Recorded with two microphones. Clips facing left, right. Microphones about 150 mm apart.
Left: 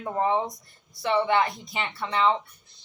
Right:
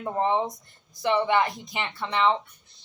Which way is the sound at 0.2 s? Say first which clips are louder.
Even; 25° right (ahead or behind).